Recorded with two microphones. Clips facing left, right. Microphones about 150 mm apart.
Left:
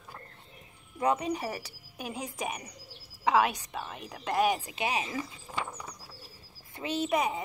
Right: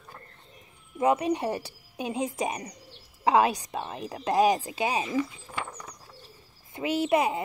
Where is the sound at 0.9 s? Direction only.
25° right (ahead or behind).